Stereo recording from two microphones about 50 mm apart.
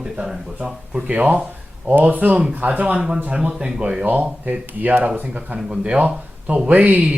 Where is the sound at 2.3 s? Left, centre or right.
Right.